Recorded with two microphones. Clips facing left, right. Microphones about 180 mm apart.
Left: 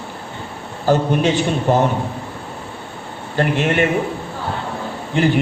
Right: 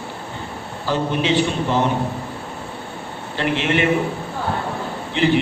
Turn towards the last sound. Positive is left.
turn(degrees=45)  # may be behind; listen again after turning